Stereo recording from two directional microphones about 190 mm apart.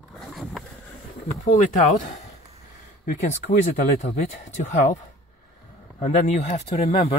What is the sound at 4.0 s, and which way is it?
Speech, 40° left (ahead or behind).